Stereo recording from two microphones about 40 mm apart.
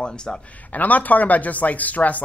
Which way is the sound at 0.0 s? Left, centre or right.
Left.